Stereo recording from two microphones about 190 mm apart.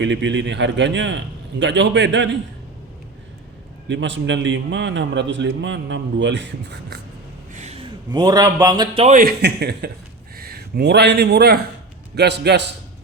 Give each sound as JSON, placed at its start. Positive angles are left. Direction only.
{"t": 0.0, "sound": "a man's voice", "side_deg": -70}
{"t": 3.8, "sound": "a man's voice", "side_deg": -70}
{"t": 7.5, "sound": "a sound", "side_deg": -35}
{"t": 8.1, "sound": "speech", "side_deg": -20}
{"t": 9.0, "sound": "a man's voice", "side_deg": -50}